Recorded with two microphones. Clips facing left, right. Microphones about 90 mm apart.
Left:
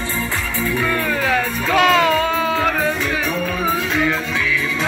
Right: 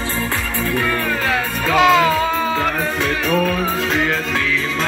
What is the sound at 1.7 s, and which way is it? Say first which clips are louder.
Music: right 1 dB; 10° right (ahead or behind).